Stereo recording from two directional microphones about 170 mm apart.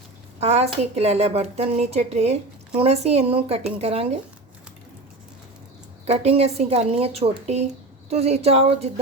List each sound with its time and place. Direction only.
0.3 s speech: 40° right (ahead or behind)
6.1 s speech: 40° right (ahead or behind)